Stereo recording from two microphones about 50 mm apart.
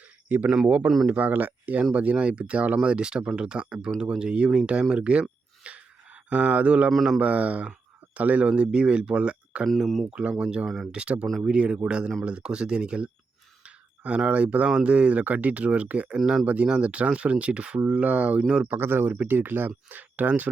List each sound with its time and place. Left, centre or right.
0.3 s speech: right
5.6 s a sound: right
6.3 s speech: right
6.9 s speech: centre
7.2 s speech: right
9.6 s speech: centre
10.1 s speech: right
16.1 s speech: centre
18.7 s speech: right